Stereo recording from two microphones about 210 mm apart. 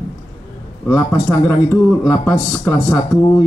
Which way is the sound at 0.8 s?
15° left (ahead or behind).